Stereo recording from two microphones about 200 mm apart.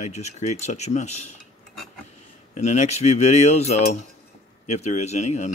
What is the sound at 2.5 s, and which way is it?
Speech, 35° left (ahead or behind).